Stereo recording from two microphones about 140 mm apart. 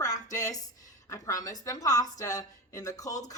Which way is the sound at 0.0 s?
25° left (ahead or behind).